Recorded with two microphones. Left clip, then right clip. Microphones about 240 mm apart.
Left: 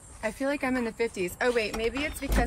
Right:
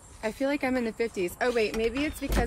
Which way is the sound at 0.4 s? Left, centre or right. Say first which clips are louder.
Right 1 dB; left.